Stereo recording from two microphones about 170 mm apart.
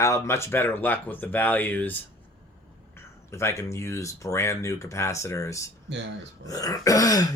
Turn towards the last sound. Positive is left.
turn(degrees=20)  # may be behind; listen again after turning